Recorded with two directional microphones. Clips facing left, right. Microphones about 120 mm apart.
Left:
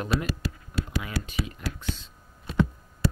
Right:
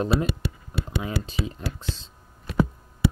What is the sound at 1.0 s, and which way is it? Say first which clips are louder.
Speech: right 3 dB; 30° right (ahead or behind).